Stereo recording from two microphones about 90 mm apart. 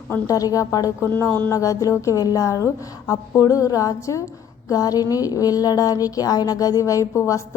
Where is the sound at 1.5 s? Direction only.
40° left (ahead or behind).